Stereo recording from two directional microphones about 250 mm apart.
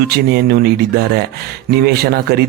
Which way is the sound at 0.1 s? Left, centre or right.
Right.